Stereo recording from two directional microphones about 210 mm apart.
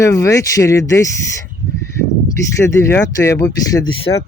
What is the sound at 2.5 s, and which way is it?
Speech, 15° left (ahead or behind).